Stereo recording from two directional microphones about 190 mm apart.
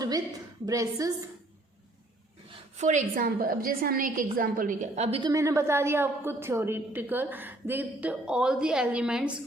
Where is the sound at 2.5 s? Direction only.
40° right (ahead or behind).